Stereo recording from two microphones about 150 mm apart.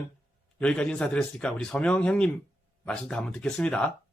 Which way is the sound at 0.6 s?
5° left (ahead or behind).